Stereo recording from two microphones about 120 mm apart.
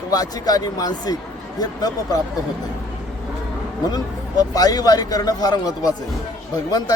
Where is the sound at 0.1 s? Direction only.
30° left (ahead or behind).